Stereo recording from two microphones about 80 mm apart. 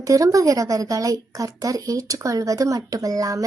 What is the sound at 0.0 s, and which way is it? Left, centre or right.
A woman's voice, right.